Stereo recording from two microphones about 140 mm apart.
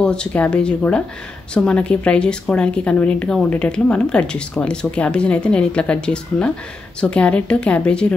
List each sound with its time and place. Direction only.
0.0 s a woman's voice: 5° left (ahead or behind)